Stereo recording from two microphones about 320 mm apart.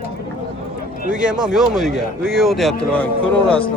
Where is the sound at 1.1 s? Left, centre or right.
Centre.